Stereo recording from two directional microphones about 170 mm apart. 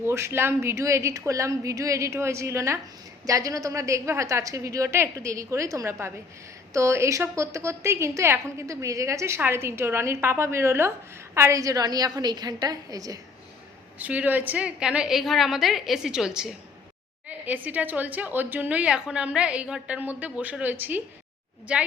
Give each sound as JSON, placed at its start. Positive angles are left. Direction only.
{"t": 0.0, "sound": "a woman's voice", "side_deg": -15}
{"t": 14.0, "sound": "a woman's voice", "side_deg": -10}